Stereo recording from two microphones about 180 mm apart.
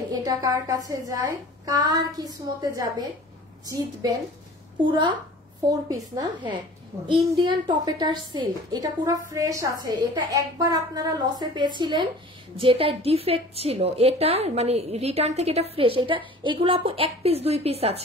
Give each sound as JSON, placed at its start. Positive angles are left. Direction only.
{"t": 0.1, "sound": "a woman's voice", "side_deg": -20}
{"t": 7.1, "sound": "a child's voice", "side_deg": 0}
{"t": 7.4, "sound": "a woman's voice", "side_deg": -25}